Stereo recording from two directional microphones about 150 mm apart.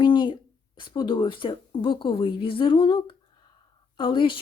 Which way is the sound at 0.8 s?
30° left (ahead or behind).